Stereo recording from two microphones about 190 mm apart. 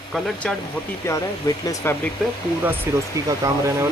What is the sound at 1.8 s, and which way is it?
Speech, 15° left (ahead or behind).